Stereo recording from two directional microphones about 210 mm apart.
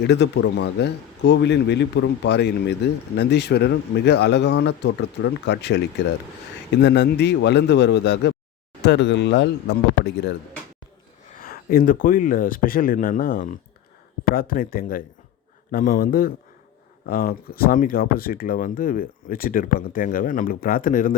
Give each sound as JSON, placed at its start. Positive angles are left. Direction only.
{"t": 0.0, "sound": "speech", "side_deg": 55}
{"t": 6.8, "sound": "speech", "side_deg": 55}
{"t": 11.3, "sound": "speech", "side_deg": 45}